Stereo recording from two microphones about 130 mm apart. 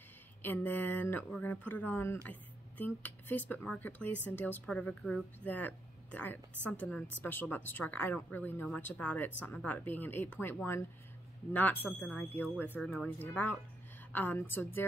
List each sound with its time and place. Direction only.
0.4 s speech: 15° left (ahead or behind)